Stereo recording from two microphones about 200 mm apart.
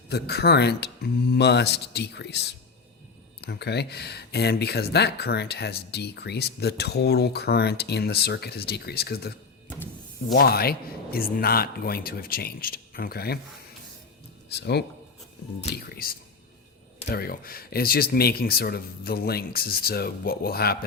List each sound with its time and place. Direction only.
0.1 s speech: 55° left (ahead or behind)
10.3 s speech: 50° left (ahead or behind)
14.5 s speech: 55° left (ahead or behind)